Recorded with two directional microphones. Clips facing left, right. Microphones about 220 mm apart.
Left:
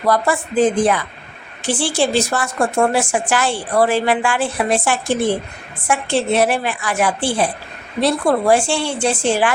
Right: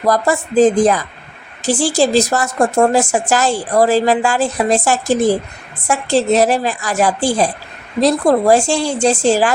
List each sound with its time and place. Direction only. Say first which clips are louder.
0.0 s a woman's voice: right 2 dB; 40° right (ahead or behind)